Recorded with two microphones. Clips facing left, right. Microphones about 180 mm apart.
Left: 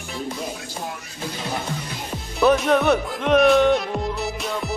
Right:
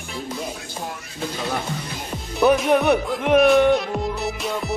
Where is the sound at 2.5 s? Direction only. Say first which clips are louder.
Right 1 dB; 5° right (ahead or behind).